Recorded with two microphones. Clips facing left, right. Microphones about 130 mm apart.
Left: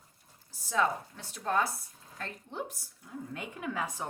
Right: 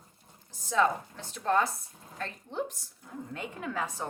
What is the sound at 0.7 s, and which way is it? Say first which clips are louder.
A woman's voice: right 3 dB; 10° left (ahead or behind).